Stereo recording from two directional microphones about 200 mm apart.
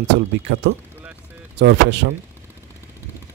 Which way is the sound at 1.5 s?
60° right (ahead or behind).